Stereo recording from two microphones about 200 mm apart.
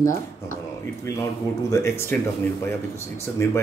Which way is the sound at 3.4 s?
15° left (ahead or behind).